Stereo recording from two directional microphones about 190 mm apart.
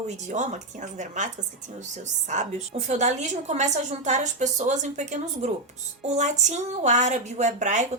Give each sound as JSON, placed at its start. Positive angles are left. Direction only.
{"t": 0.3, "sound": "a woman's voice", "side_deg": -40}
{"t": 2.3, "sound": "a woman's voice", "side_deg": -35}